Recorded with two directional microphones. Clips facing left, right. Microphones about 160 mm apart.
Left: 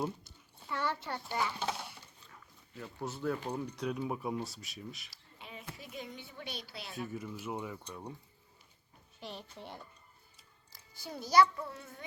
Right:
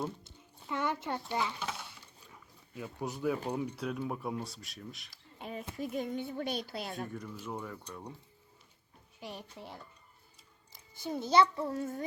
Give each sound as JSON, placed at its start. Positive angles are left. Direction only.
{"t": 0.3, "sound": "a child's voice", "side_deg": -15}
{"t": 2.2, "sound": "dog", "side_deg": -10}
{"t": 3.5, "sound": "speech", "side_deg": -5}
{"t": 5.1, "sound": "a sound", "side_deg": -45}
{"t": 5.7, "sound": "speech", "side_deg": -50}
{"t": 7.1, "sound": "speech", "side_deg": 5}
{"t": 9.2, "sound": "a child's voice", "side_deg": -10}
{"t": 10.7, "sound": "a child's voice", "side_deg": -20}
{"t": 11.6, "sound": "speech", "side_deg": -45}